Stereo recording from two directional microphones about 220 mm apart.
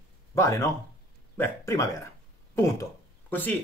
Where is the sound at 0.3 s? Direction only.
15° left (ahead or behind).